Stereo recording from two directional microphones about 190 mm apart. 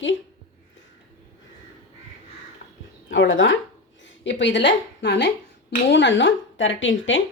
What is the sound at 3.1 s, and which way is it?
A woman's voice, 80° left.